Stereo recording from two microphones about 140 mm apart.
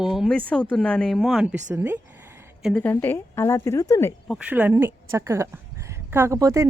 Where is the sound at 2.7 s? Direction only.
15° left (ahead or behind).